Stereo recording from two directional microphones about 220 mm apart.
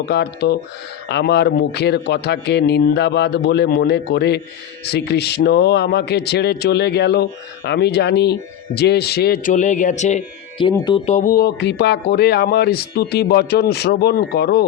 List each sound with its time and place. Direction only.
0.0 s speech: 50° left (ahead or behind); by 10.7 s 30° left (ahead or behind)
10.7 s speech: 20° left (ahead or behind); by 14.6 s 45° left (ahead or behind)